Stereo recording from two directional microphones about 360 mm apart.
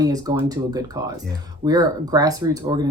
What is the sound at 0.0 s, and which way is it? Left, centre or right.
Speech, centre.